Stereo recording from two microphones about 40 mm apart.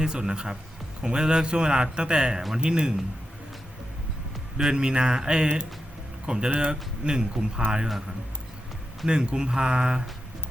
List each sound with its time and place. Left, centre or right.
0.0 s a man's voice: centre
4.5 s a man's voice: right
9.0 s a man's voice: right